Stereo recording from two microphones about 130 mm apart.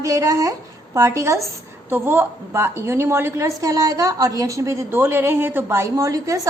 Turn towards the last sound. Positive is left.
turn(degrees=-25)  # may be behind; listen again after turning